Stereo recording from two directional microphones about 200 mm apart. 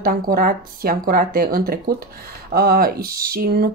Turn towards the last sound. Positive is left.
turn(degrees=-50)  # may be behind; listen again after turning